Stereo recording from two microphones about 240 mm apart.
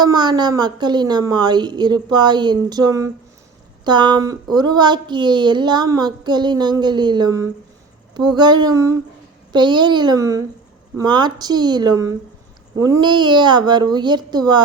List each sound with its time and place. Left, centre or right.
0.0 s a woman's voice: centre